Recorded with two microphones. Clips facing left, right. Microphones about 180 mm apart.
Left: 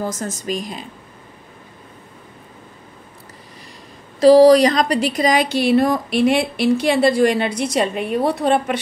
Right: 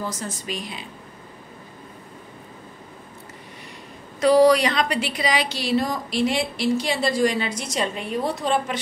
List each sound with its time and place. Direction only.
0.0 s speech: 45° left (ahead or behind)
4.2 s a woman's voice: 35° left (ahead or behind); by 8.7 s 60° left (ahead or behind)